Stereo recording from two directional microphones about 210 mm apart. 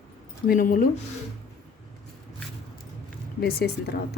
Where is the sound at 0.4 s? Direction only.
40° left (ahead or behind).